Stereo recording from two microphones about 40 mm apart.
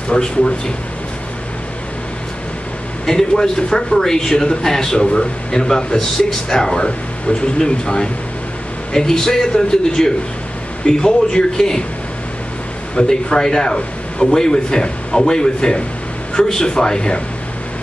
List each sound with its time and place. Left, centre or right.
0.1 s a man's voice: centre
3.1 s a man's voice: centre
12.9 s a man's voice: centre